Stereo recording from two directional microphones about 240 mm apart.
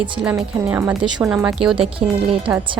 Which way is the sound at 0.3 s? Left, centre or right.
Centre.